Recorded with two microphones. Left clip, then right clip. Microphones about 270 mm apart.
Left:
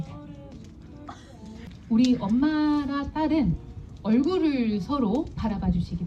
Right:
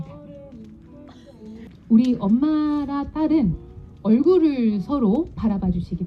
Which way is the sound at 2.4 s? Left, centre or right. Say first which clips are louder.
Right 2 dB; right.